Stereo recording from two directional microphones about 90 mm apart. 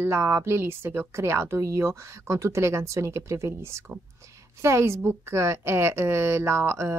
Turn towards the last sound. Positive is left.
turn(degrees=-30)  # may be behind; listen again after turning